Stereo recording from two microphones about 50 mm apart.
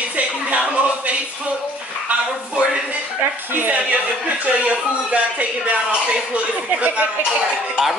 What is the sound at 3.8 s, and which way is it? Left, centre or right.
Speech, right.